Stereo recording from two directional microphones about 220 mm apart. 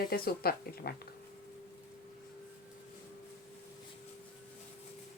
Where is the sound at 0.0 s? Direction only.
45° left (ahead or behind).